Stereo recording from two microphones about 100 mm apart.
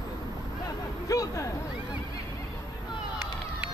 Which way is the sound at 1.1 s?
35° left (ahead or behind).